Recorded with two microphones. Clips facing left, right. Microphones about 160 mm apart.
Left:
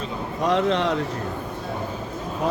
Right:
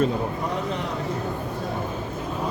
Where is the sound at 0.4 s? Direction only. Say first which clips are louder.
Left 7 dB; 90° left.